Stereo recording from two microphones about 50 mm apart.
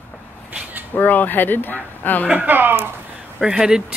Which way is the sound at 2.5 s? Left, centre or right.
Right.